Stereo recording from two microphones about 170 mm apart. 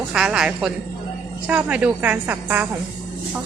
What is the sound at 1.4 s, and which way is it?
Music, 5° right (ahead or behind).